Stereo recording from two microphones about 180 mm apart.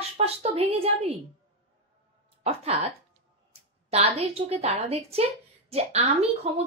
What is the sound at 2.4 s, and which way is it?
Speech, 35° right (ahead or behind).